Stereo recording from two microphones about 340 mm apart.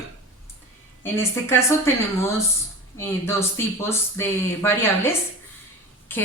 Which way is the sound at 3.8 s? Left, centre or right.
Centre.